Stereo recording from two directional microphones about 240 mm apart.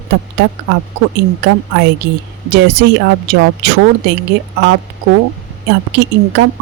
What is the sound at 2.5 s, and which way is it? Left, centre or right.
Speech, right.